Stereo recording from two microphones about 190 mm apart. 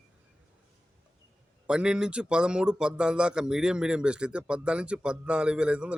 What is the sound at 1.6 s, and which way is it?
Speech, 5° right (ahead or behind).